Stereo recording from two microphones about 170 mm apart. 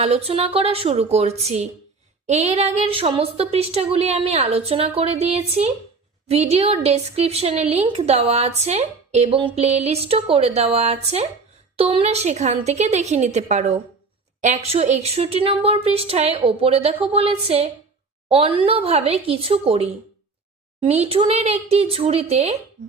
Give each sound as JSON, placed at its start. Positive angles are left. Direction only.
{"t": 0.0, "sound": "a woman's voice", "side_deg": -35}